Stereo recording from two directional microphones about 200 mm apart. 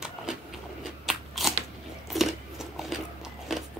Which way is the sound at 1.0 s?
Centre (ahead or behind).